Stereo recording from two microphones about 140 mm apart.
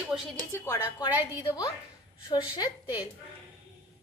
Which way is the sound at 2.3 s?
30° left (ahead or behind).